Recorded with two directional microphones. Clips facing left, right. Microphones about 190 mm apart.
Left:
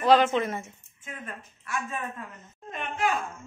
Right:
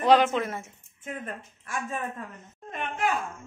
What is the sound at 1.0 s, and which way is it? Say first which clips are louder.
A woman's voice: right 4 dB; 45° right (ahead or behind).